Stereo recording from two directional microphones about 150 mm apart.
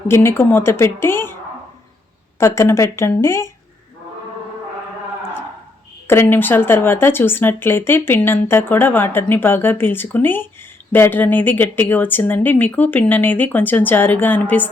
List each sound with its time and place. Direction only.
0.1 s speech: 15° left (ahead or behind)
2.4 s speech: 20° left (ahead or behind)
6.1 s speech: 15° left (ahead or behind)